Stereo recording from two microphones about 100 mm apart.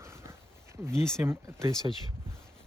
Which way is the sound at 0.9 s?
5° left (ahead or behind).